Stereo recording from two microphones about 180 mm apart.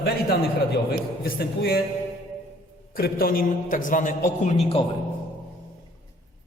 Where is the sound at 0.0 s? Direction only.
60° left (ahead or behind).